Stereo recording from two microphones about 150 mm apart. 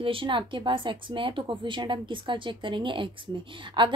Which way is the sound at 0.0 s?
35° right (ahead or behind).